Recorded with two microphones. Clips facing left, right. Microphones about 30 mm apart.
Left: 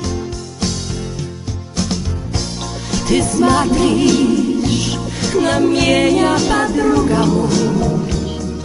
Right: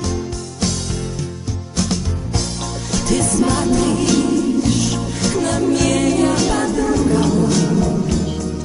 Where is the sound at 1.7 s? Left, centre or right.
Centre.